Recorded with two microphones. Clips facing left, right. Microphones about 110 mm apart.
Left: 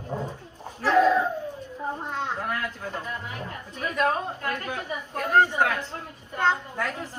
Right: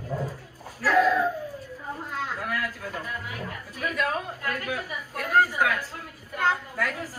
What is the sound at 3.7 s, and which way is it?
A woman's voice, 35° left (ahead or behind).